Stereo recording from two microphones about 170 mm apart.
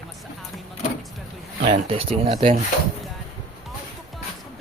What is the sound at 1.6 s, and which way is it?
Speech, 35° right (ahead or behind).